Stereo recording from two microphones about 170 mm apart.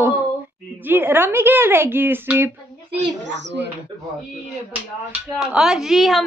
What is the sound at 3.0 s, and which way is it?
Speech, 90° right.